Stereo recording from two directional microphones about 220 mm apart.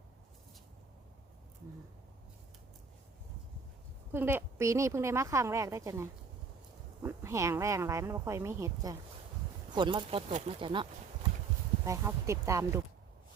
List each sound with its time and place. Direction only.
4.1 s a woman's voice: 10° right (ahead or behind)
11.9 s a woman's voice: 15° right (ahead or behind)